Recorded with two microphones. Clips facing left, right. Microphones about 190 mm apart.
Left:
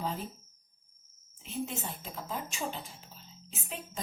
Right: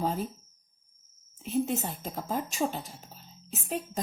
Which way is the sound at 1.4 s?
45° right (ahead or behind).